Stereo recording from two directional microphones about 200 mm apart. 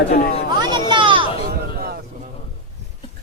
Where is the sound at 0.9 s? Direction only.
25° right (ahead or behind).